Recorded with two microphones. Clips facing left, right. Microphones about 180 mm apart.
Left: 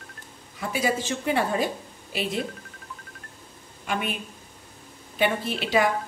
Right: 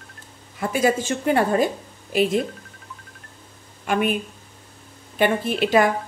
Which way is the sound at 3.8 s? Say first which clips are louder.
Right 7 dB; 50° right (ahead or behind).